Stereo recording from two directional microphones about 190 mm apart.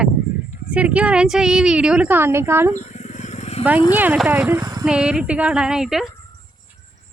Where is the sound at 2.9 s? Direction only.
40° left (ahead or behind).